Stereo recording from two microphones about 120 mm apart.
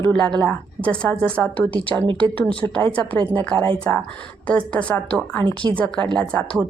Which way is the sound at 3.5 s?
45° right (ahead or behind).